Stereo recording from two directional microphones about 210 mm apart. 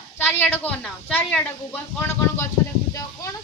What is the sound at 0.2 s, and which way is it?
Speech, 10° left (ahead or behind).